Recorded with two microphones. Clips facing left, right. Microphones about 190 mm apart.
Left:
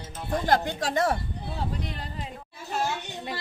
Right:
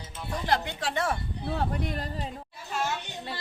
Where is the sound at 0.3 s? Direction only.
45° left (ahead or behind).